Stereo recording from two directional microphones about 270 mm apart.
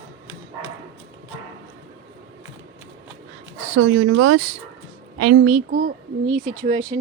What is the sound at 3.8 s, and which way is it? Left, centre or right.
Speech, right.